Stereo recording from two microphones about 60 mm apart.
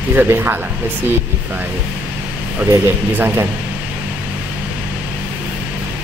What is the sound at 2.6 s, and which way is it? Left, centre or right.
Speech, right.